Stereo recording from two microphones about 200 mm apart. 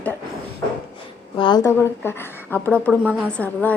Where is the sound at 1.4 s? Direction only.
20° left (ahead or behind).